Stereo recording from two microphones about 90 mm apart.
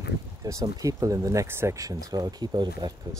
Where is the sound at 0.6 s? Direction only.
40° right (ahead or behind).